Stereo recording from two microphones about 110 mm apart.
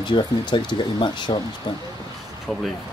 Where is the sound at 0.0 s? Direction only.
45° left (ahead or behind).